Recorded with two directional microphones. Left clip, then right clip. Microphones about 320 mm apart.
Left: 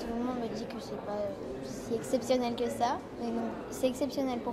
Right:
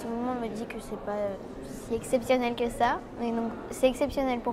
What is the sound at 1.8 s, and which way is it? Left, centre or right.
A woman's voice, right.